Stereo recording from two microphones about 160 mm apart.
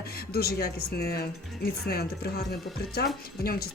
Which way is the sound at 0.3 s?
75° left (ahead or behind).